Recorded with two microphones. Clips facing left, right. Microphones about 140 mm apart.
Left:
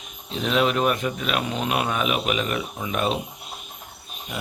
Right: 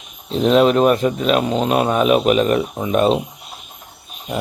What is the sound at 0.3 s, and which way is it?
Speech, 35° right (ahead or behind).